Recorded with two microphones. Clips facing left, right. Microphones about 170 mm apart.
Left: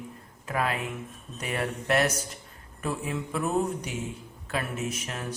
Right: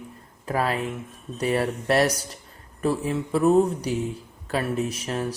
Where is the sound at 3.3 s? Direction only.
35° right (ahead or behind).